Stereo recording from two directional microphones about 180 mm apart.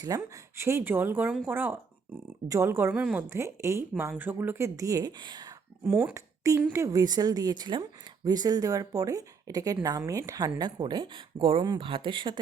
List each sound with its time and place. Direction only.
0.0 s a woman's voice: 15° right (ahead or behind)
5.9 s a woman's voice: 10° right (ahead or behind); by 12.4 s 25° right (ahead or behind)